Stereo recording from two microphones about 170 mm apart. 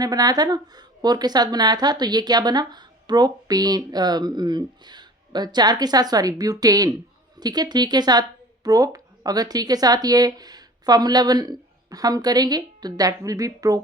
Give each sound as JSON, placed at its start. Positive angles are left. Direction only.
{"t": 0.0, "sound": "a woman's voice", "side_deg": -20}